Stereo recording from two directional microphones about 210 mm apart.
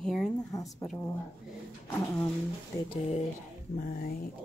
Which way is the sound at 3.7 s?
40° left (ahead or behind).